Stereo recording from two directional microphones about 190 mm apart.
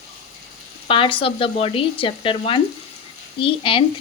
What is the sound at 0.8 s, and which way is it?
Speech, 25° left (ahead or behind).